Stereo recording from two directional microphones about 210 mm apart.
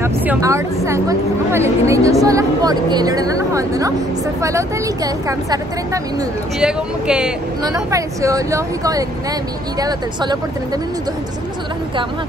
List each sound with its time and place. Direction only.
0.0 s a sound: 15° right (ahead or behind)
0.8 s a woman's voice: 15° right (ahead or behind)
6.6 s speech: 5° right (ahead or behind)
7.6 s a woman's voice: 15° right (ahead or behind)